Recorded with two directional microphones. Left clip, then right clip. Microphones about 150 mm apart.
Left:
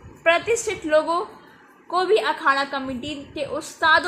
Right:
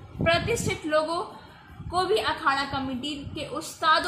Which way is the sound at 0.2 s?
40° left (ahead or behind).